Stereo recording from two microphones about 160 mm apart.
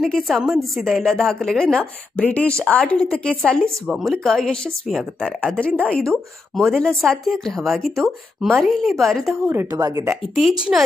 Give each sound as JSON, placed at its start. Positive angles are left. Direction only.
{"t": 0.0, "sound": "speech", "side_deg": 0}
{"t": 8.5, "sound": "speech", "side_deg": -10}
{"t": 8.8, "sound": "speech", "side_deg": 0}
{"t": 9.3, "sound": "a woman's voice", "side_deg": -15}
{"t": 10.7, "sound": "speech", "side_deg": -5}